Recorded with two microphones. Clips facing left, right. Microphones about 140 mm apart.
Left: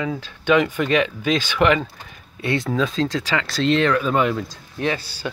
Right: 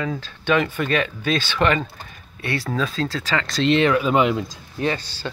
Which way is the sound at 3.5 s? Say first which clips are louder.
Right 1 dB; centre (ahead or behind).